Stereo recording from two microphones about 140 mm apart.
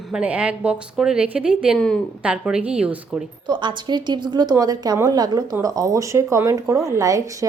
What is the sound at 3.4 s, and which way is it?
A woman's voice, 35° right (ahead or behind).